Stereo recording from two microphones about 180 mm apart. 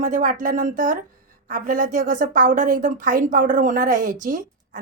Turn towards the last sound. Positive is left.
turn(degrees=-45)  # may be behind; listen again after turning